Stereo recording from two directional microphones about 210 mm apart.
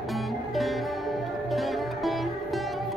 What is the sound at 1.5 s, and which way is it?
Music, centre (ahead or behind).